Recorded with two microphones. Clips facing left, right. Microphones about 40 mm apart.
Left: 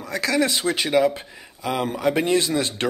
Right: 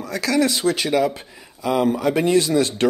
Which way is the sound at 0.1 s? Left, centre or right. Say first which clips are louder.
Right 2 dB; left.